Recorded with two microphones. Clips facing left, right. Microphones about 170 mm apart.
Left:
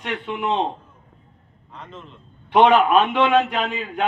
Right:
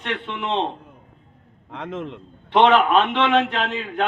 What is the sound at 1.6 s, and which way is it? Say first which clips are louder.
Speech: right 10 dB; 90° right.